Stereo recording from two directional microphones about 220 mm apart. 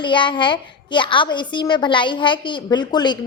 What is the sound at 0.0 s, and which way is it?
A child's voice, 20° left (ahead or behind).